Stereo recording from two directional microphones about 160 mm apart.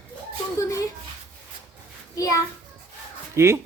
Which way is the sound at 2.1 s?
20° left (ahead or behind).